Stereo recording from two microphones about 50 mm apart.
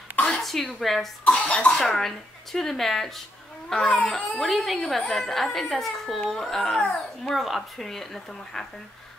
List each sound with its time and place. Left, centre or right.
0.4 s a woman's voice: centre
1.2 s cough: left
1.8 s speech: centre
4.4 s speech: centre